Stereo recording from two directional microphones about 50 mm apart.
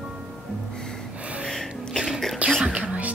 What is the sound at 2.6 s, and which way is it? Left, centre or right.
Music, centre.